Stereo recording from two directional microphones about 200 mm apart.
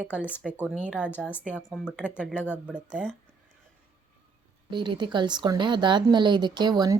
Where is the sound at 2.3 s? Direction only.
10° left (ahead or behind).